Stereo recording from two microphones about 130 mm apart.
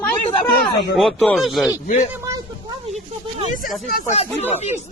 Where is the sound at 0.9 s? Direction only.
Centre (ahead or behind).